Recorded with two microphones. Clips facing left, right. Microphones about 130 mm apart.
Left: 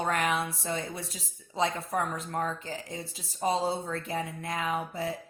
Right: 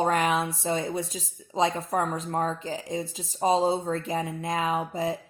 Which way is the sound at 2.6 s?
15° right (ahead or behind).